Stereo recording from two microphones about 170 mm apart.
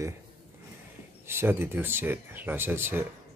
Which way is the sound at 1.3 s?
15° right (ahead or behind).